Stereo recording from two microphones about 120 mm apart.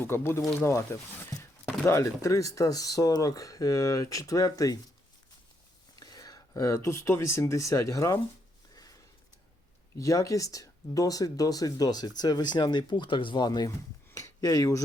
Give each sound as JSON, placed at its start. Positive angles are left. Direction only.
{"t": 0.0, "sound": "speech", "side_deg": 20}
{"t": 6.0, "sound": "speech", "side_deg": 30}
{"t": 8.7, "sound": "a sound", "side_deg": 30}
{"t": 10.0, "sound": "speech", "side_deg": 30}